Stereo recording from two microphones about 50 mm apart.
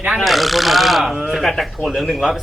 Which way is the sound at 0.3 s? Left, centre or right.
Centre.